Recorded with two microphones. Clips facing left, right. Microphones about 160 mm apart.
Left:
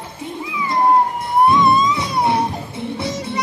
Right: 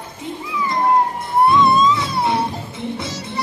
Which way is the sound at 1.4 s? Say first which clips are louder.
Right 1 dB; 15° left (ahead or behind).